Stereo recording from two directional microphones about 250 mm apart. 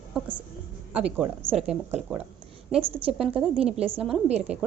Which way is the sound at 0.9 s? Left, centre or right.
Centre.